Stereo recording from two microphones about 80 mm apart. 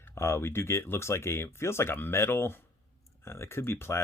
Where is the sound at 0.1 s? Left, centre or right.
Left.